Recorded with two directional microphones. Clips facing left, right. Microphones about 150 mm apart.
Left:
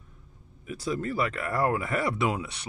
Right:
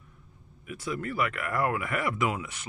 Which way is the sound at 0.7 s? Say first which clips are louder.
Left 3 dB; 30° left (ahead or behind).